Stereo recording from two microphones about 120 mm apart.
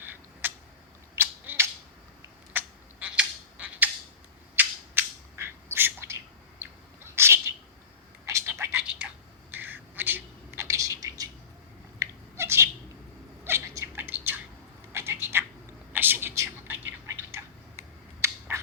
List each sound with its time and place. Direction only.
0.0 s a sound: 15° right (ahead or behind)
4.5 s bird: 20° right (ahead or behind)
8.3 s whispering: 25° right (ahead or behind)
11.9 s cat: 20° right (ahead or behind)
13.4 s bird: 20° right (ahead or behind)
14.9 s cat: 20° right (ahead or behind)
15.9 s whispering: 15° right (ahead or behind)
18.2 s finger snapping: 20° right (ahead or behind)